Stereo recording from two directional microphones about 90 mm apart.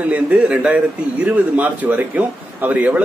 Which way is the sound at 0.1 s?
15° right (ahead or behind).